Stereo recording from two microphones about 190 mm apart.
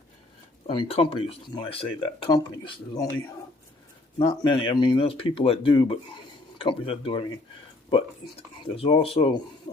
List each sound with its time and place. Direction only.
0.7 s speech: 30° left (ahead or behind)
4.2 s speech: 25° left (ahead or behind)